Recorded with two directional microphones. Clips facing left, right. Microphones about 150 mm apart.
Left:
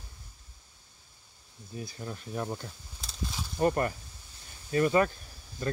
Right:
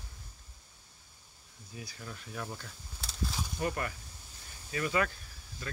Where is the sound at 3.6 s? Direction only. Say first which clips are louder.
Left 9 dB; 40° left (ahead or behind).